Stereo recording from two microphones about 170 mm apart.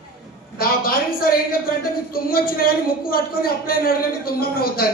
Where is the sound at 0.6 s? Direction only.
60° left (ahead or behind).